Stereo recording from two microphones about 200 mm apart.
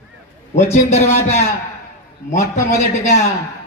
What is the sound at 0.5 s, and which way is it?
A man's voice, 30° left (ahead or behind).